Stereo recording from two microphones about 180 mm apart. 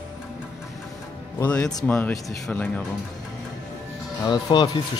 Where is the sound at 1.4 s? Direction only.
5° left (ahead or behind).